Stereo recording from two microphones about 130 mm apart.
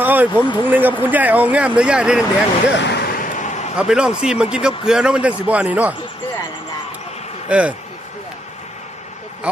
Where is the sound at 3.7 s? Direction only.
5° right (ahead or behind).